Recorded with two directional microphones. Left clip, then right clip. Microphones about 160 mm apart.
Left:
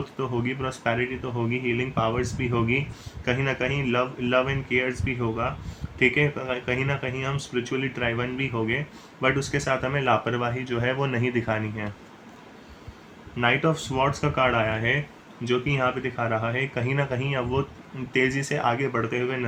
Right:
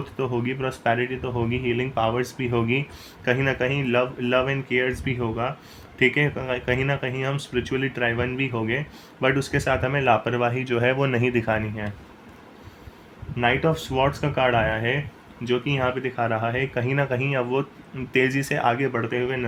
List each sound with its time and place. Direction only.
0.2 s speech: 40° right (ahead or behind)
13.3 s speech: 35° right (ahead or behind)